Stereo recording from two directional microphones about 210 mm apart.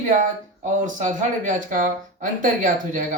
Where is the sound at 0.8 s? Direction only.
35° right (ahead or behind).